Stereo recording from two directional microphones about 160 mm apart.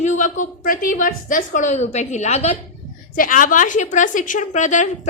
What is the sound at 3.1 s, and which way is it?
A woman's voice, 60° left (ahead or behind).